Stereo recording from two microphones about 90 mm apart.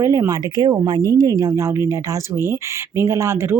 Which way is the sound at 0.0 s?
35° right (ahead or behind).